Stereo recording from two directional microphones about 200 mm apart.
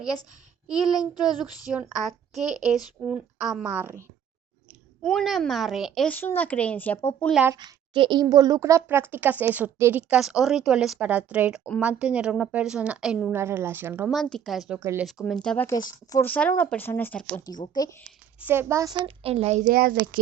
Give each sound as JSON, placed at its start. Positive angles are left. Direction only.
{"t": 0.7, "sound": "speech", "side_deg": 0}
{"t": 5.0, "sound": "speech", "side_deg": 0}
{"t": 7.4, "sound": "a woman's voice", "side_deg": -20}
{"t": 13.3, "sound": "a woman's voice", "side_deg": -10}
{"t": 14.2, "sound": "speech", "side_deg": 0}
{"t": 14.8, "sound": "a woman's voice", "side_deg": -10}
{"t": 15.0, "sound": "speech", "side_deg": 0}
{"t": 17.4, "sound": "a woman's voice", "side_deg": 20}
{"t": 18.3, "sound": "a woman's voice", "side_deg": -10}
{"t": 19.0, "sound": "a child's voice", "side_deg": -30}